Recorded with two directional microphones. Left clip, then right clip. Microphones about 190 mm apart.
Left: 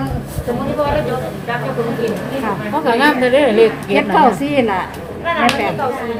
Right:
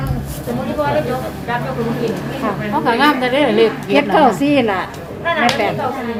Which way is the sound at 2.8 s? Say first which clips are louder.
Left 1 dB; 15° right (ahead or behind).